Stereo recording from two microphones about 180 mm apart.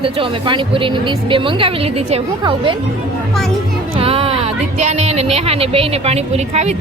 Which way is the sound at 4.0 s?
30° right (ahead or behind).